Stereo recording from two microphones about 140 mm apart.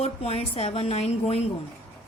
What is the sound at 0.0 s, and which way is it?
A woman's voice, 50° left (ahead or behind).